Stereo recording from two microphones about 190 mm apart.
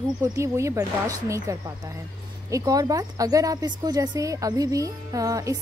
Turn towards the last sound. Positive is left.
turn(degrees=-20)  # may be behind; listen again after turning